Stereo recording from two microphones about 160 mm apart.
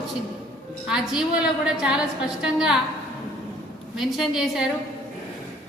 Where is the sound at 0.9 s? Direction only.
5° right (ahead or behind).